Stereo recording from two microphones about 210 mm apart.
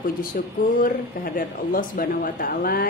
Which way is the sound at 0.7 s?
40° left (ahead or behind).